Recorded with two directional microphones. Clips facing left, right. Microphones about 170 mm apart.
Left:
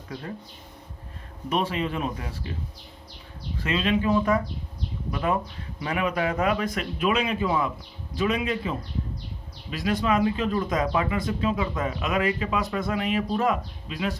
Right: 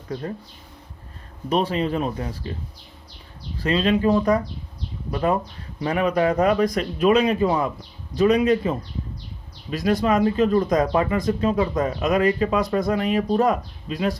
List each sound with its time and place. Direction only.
1.5 s speech: 35° right (ahead or behind)
3.6 s speech: 35° right (ahead or behind)